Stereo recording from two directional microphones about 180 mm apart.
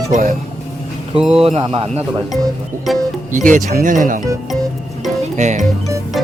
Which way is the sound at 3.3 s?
45° right (ahead or behind).